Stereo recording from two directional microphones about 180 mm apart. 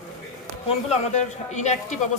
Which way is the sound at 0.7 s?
40° left (ahead or behind).